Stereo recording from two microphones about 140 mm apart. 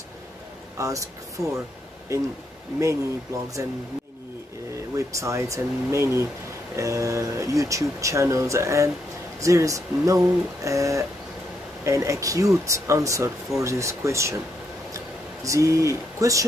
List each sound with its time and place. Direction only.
0.7 s speech: 25° right (ahead or behind)
2.1 s speech: 25° right (ahead or behind)
3.6 s speech: 20° right (ahead or behind)
4.9 s speech: 20° right (ahead or behind)
15.0 s a sound: 20° right (ahead or behind)